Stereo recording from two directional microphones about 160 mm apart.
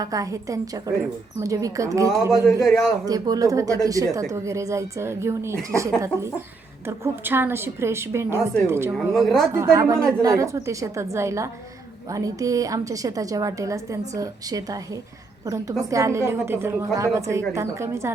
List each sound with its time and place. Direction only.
0.0 s a woman's voice: 20° right (ahead or behind)
2.6 s a woman's voice: centre (ahead or behind)
3.1 s a woman's voice: 25° right (ahead or behind)
8.9 s a woman's voice: centre (ahead or behind)
9.5 s a woman's voice: 15° right (ahead or behind)